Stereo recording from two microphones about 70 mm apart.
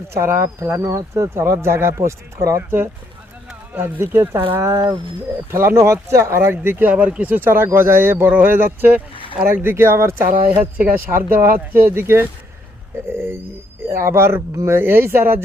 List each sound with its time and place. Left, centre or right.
0.1 s speech: right
2.6 s speech: right
5.5 s speech: right
6.9 s speech: centre; by 10.3 s right
10.5 s speech: right
14.8 s speech: right